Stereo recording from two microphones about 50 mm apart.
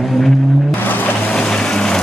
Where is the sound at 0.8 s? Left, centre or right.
Left.